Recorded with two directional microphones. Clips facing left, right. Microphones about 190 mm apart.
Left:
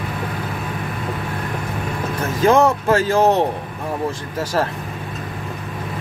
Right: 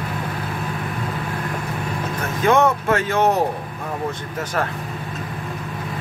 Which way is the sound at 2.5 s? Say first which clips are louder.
Left 2 dB; 30° left (ahead or behind).